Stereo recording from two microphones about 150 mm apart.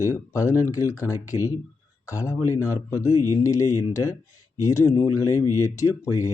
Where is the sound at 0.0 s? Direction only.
20° left (ahead or behind).